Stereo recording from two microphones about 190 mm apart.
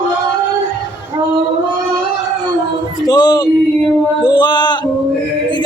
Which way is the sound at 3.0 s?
20° left (ahead or behind).